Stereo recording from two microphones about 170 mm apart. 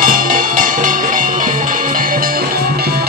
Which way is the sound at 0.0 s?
55° right (ahead or behind).